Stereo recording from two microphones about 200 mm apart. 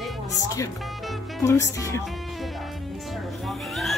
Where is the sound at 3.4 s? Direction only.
Centre (ahead or behind).